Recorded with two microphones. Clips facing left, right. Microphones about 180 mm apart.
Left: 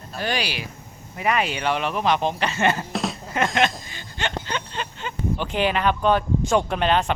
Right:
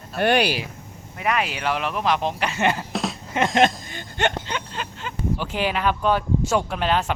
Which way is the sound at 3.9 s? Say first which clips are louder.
Right 6 dB; 55° right (ahead or behind).